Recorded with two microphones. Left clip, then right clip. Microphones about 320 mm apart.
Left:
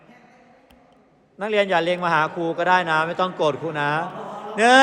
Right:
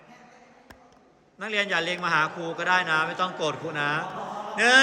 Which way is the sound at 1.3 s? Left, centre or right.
Centre.